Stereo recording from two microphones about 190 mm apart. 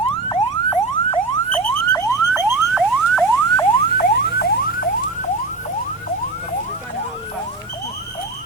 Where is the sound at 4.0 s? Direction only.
55° left (ahead or behind).